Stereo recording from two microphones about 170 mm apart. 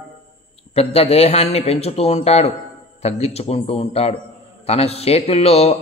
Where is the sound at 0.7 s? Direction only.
40° left (ahead or behind).